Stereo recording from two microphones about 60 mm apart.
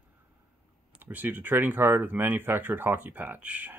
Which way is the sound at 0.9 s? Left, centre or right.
Right.